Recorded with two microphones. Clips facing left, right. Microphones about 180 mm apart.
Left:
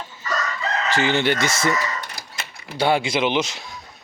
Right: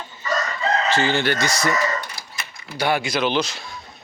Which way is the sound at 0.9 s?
20° left (ahead or behind).